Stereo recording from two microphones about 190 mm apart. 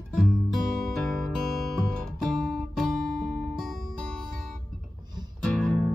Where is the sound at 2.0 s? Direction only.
Centre (ahead or behind).